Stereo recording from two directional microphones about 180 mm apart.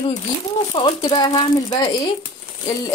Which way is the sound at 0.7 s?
30° left (ahead or behind).